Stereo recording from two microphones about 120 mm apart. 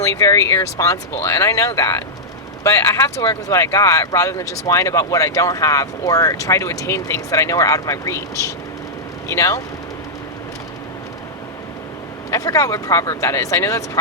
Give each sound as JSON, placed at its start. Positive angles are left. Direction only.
{"t": 0.0, "sound": "speech", "side_deg": 25}
{"t": 12.3, "sound": "speech", "side_deg": 30}